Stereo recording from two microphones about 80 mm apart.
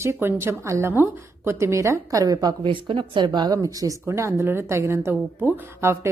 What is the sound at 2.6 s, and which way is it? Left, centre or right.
A woman's voice, right.